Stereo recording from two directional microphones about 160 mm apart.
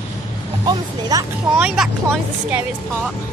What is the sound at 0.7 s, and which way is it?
Speech, 25° right (ahead or behind).